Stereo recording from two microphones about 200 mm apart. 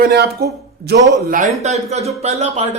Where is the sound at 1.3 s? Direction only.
35° right (ahead or behind).